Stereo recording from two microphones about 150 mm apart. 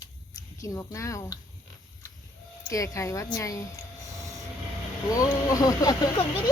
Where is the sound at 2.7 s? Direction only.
20° left (ahead or behind).